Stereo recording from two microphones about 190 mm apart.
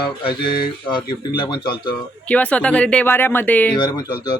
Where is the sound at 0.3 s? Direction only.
25° left (ahead or behind).